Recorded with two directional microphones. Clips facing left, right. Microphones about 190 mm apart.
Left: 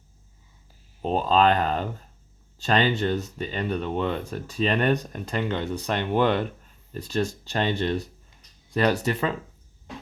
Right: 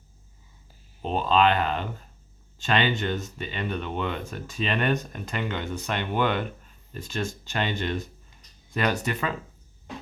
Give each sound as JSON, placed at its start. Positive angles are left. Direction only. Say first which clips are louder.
{"t": 1.0, "sound": "speech", "louder": "left 2 dB", "side_deg": 40}